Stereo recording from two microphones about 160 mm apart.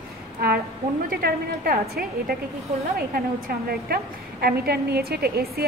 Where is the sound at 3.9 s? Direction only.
70° right (ahead or behind).